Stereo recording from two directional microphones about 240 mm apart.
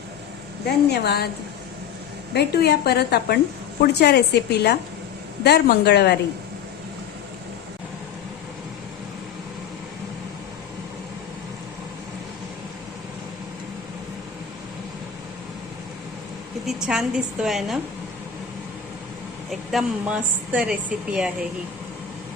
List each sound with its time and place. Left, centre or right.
0.9 s a woman's voice: left
2.3 s a woman's voice: left
16.6 s a woman's voice: centre
19.5 s a woman's voice: centre